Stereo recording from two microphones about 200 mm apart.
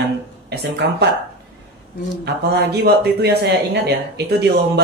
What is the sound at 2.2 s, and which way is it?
Speech, 55° right (ahead or behind).